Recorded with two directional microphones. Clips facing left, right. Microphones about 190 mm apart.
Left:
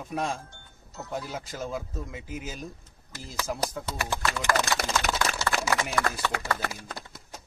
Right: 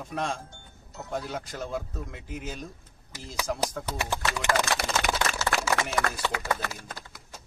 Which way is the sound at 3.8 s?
15° right (ahead or behind).